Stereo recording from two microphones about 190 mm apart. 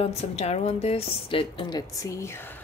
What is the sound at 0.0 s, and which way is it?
A woman's voice, 35° left (ahead or behind).